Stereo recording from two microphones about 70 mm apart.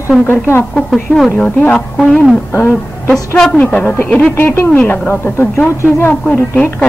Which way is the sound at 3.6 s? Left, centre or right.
Left.